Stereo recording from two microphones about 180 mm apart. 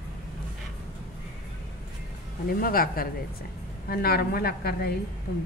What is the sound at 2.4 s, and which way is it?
A woman's voice, 55° left (ahead or behind).